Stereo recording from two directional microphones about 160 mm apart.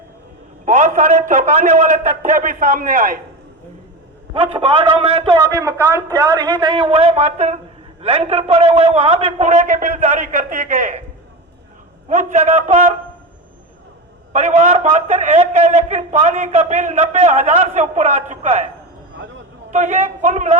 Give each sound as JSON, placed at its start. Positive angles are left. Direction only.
{"t": 0.6, "sound": "a man's voice", "side_deg": -50}
{"t": 4.4, "sound": "a man's voice", "side_deg": -35}
{"t": 12.0, "sound": "a man's voice", "side_deg": -50}
{"t": 14.3, "sound": "a man's voice", "side_deg": -45}
{"t": 19.7, "sound": "a man's voice", "side_deg": -45}